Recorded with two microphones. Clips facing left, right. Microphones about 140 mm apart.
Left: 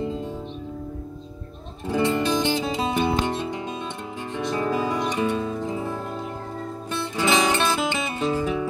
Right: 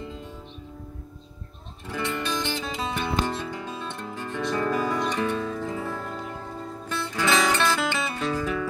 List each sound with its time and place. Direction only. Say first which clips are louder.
1.9 s music: left 8 dB; 25° left (ahead or behind)